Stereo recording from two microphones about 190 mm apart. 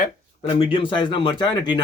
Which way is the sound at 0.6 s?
25° left (ahead or behind).